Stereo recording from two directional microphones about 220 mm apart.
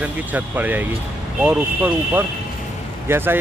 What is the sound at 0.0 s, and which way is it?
Speech, 5° right (ahead or behind).